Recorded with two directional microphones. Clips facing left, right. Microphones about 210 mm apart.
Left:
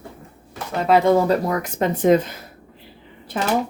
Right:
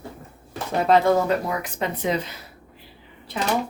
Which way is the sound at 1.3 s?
45° left (ahead or behind).